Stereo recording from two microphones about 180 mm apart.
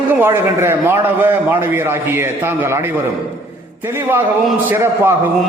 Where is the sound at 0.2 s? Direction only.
15° right (ahead or behind).